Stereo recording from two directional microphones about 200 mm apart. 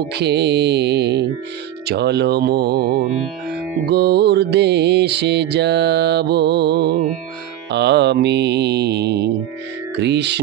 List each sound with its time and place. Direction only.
0.1 s music: 55° right (ahead or behind)